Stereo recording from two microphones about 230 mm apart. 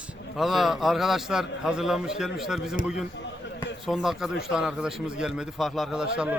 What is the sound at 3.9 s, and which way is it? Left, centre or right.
A man's voice, centre.